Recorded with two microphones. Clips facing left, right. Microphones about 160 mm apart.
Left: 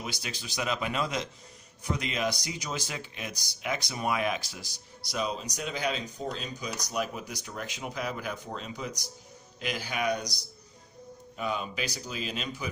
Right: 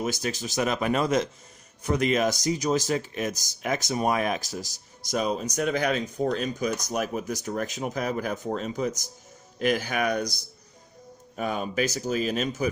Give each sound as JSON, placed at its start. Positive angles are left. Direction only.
{"t": 0.0, "sound": "speech", "side_deg": -45}
{"t": 11.3, "sound": "speech", "side_deg": -50}